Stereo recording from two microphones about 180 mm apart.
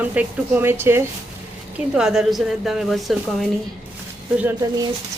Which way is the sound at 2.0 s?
5° right (ahead or behind).